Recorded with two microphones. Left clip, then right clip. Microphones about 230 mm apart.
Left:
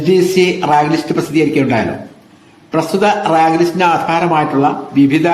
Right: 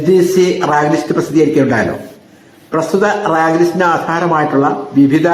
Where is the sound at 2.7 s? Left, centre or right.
Centre.